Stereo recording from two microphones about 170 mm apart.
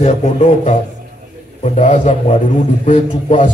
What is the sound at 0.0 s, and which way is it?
A man's voice, 40° left (ahead or behind).